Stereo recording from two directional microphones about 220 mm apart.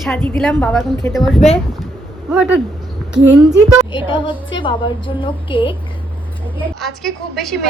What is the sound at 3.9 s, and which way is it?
A woman's voice, 20° left (ahead or behind).